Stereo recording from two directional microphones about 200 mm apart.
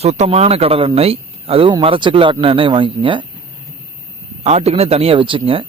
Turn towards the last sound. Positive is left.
turn(degrees=-25)  # may be behind; listen again after turning